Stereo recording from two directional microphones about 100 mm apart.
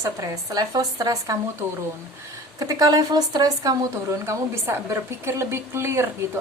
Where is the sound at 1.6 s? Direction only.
25° right (ahead or behind).